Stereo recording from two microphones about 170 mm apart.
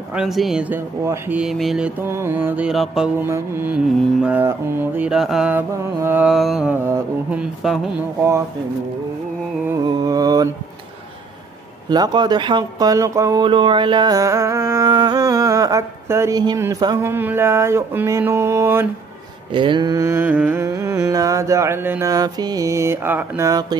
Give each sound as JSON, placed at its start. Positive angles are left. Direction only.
{"t": 0.1, "sound": "speech", "side_deg": 0}
{"t": 3.3, "sound": "mantra", "side_deg": -15}
{"t": 9.8, "sound": "speech", "side_deg": -25}
{"t": 11.9, "sound": "speech", "side_deg": -25}
{"t": 19.5, "sound": "mantra", "side_deg": -30}
{"t": 20.6, "sound": "speech", "side_deg": -20}